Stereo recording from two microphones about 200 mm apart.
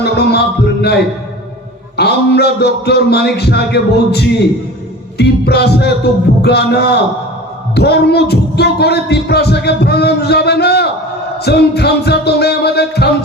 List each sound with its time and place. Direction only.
0.0 s music: 55° left (ahead or behind)
2.0 s music: 55° left (ahead or behind)